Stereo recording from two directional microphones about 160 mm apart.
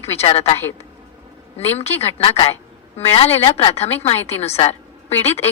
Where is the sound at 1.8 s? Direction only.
40° left (ahead or behind).